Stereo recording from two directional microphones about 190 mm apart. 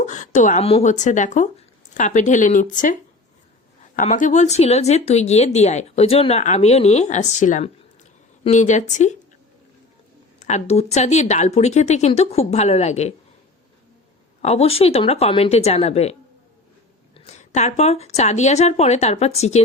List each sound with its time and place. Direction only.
0.0 s speech: 40° left (ahead or behind)
10.4 s speech: 35° left (ahead or behind)
14.4 s speech: 35° left (ahead or behind)
17.2 s speech: 35° left (ahead or behind)